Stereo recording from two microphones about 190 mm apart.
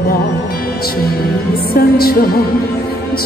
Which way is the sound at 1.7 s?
50° left (ahead or behind).